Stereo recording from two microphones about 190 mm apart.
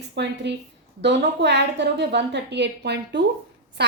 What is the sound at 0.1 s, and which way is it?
A woman's voice, 65° right (ahead or behind).